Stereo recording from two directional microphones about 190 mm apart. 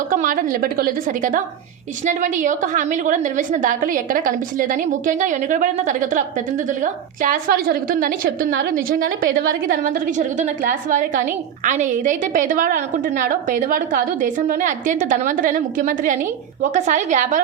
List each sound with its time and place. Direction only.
0.1 s a woman's voice: 45° right (ahead or behind)